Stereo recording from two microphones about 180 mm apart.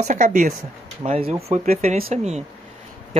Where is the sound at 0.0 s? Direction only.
45° right (ahead or behind).